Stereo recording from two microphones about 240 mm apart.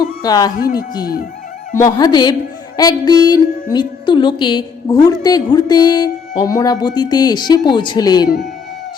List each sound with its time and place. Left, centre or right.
0.2 s speech: centre
1.7 s speech: centre